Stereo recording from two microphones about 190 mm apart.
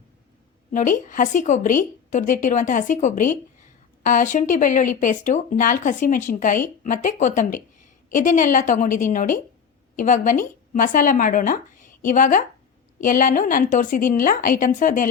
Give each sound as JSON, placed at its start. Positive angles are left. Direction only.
{"t": 0.7, "sound": "a woman's voice", "side_deg": 45}